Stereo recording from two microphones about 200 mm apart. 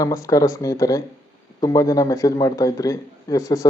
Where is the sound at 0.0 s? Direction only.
15° left (ahead or behind).